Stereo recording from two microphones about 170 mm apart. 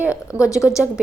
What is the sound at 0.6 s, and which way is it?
Speech, 20° left (ahead or behind).